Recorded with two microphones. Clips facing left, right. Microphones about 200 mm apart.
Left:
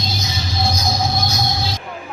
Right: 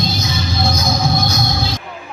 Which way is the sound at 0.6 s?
55° right (ahead or behind).